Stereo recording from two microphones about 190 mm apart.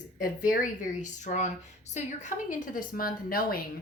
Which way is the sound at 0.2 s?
45° left (ahead or behind).